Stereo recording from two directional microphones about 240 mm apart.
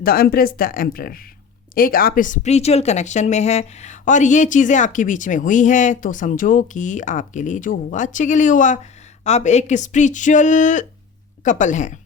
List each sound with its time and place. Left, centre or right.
0.0 s speech: left